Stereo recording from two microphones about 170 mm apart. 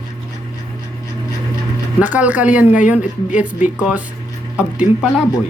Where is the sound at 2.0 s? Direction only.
10° right (ahead or behind).